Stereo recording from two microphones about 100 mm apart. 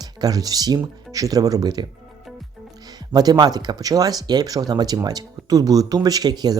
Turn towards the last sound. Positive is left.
turn(degrees=-40)  # may be behind; listen again after turning